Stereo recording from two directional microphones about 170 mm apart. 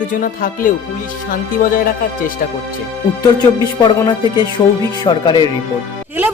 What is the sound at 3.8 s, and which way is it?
Music, 25° left (ahead or behind).